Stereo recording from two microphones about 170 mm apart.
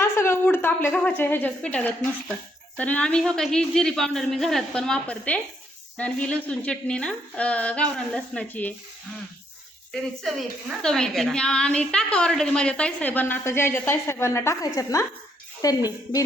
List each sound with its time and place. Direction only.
0.0 s a woman's voice: 15° left (ahead or behind)
9.9 s a woman's voice: centre (ahead or behind); by 16.2 s 20° left (ahead or behind)